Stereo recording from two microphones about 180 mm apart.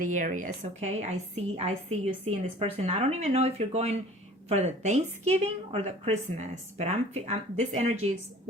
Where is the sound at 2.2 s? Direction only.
35° right (ahead or behind).